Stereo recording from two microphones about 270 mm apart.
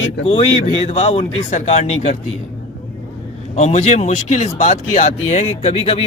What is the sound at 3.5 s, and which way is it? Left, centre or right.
Speech, left.